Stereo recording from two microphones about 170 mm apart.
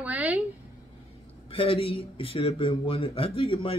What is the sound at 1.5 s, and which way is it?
Speech, 35° left (ahead or behind).